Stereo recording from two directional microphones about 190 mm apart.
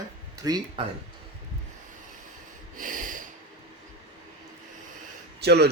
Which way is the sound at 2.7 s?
45° right (ahead or behind).